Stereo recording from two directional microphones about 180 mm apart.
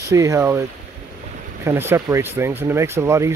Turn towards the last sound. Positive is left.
turn(degrees=-15)  # may be behind; listen again after turning